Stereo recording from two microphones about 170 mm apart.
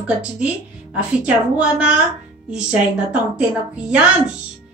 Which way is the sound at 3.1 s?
5° right (ahead or behind).